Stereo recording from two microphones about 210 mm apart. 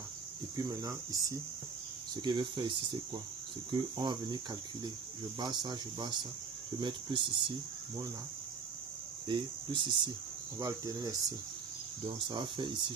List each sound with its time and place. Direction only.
0.5 s speech: 15° right (ahead or behind)
5.4 s speech: 20° right (ahead or behind)
9.2 s speech: 25° right (ahead or behind)
12.3 s speech: 20° right (ahead or behind)